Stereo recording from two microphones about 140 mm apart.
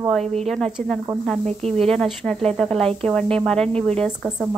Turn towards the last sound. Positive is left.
turn(degrees=0)  # may be behind; listen again after turning